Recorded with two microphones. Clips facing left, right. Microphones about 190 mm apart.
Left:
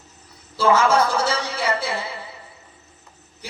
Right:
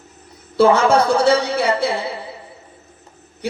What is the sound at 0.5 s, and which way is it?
A man's voice, 60° right (ahead or behind).